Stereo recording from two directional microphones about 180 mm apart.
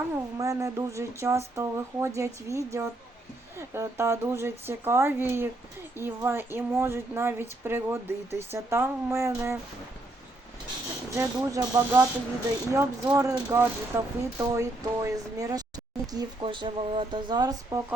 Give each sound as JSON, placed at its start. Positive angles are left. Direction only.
{"t": 0.1, "sound": "speech", "side_deg": -15}
{"t": 11.1, "sound": "speech", "side_deg": -15}